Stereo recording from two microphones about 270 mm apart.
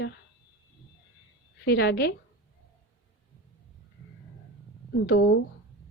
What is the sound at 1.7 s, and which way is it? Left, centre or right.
Speech, left.